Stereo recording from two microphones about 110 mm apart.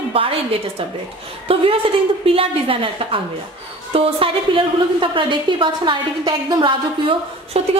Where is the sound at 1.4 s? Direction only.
55° right (ahead or behind).